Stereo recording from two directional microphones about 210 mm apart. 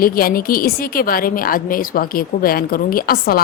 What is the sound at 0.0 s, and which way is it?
A woman's voice, 45° left (ahead or behind).